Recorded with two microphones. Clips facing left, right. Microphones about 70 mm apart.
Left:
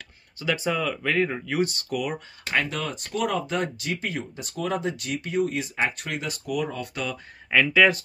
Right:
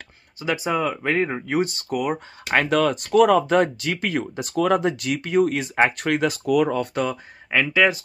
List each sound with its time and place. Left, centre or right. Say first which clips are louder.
0.4 s speech: right 3 dB; right
2.5 s speech: right 8 dB; right
3.3 s speech: right 9 dB; right
6.7 s speech: right 9 dB; right
7.5 s speech: even; centre